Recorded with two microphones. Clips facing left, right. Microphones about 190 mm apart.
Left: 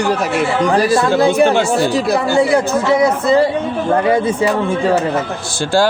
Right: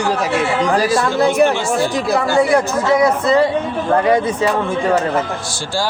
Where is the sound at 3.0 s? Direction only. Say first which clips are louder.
Even; 30° left (ahead or behind).